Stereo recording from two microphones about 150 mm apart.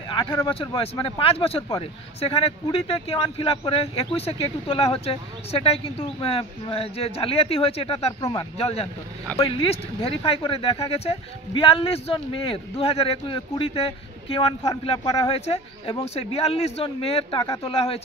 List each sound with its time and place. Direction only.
0.5 s speech: 40° left (ahead or behind)
8.2 s speech: 25° left (ahead or behind)
8.5 s speech: 45° left (ahead or behind)